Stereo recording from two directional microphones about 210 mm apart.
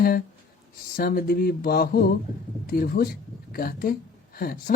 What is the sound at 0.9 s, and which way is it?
Speech, 45° left (ahead or behind).